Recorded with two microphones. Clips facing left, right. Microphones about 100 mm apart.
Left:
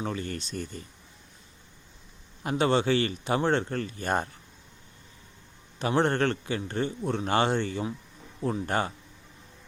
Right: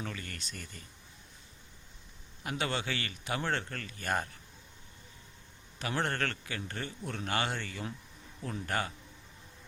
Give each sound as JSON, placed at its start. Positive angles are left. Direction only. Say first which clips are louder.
{"t": 0.0, "sound": "speech", "louder": "left 9 dB", "side_deg": 30}
{"t": 2.4, "sound": "speech", "louder": "left 10 dB", "side_deg": 30}
{"t": 5.8, "sound": "speech", "louder": "left 9 dB", "side_deg": 25}